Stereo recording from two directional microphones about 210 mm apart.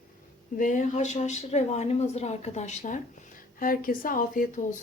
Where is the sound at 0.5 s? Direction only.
40° left (ahead or behind).